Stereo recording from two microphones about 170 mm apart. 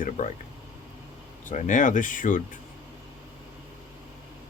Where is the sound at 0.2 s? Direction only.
50° left (ahead or behind).